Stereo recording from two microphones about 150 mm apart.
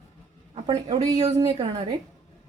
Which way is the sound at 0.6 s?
25° right (ahead or behind).